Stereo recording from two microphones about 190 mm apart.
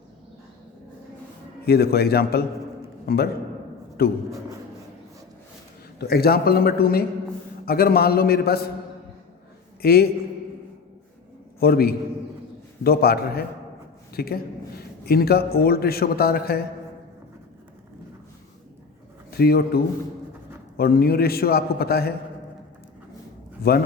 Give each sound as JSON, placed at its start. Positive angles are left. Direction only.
{"t": 1.6, "sound": "a man's voice", "side_deg": 55}
{"t": 6.0, "sound": "a man's voice", "side_deg": 55}
{"t": 9.8, "sound": "a man's voice", "side_deg": 55}
{"t": 11.6, "sound": "a man's voice", "side_deg": 55}
{"t": 19.3, "sound": "a man's voice", "side_deg": 55}
{"t": 23.6, "sound": "a man's voice", "side_deg": 55}